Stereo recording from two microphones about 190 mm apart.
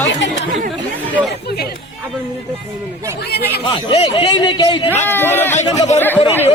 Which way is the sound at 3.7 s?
30° left (ahead or behind).